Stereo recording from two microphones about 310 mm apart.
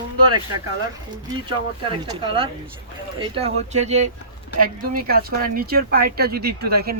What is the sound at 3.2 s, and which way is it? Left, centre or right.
Speech, centre.